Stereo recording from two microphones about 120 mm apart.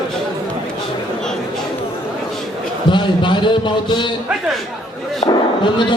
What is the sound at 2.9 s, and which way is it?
A man's voice, 40° left (ahead or behind).